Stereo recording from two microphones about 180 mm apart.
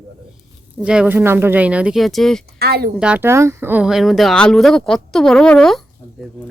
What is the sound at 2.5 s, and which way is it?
Speech, 60° right (ahead or behind).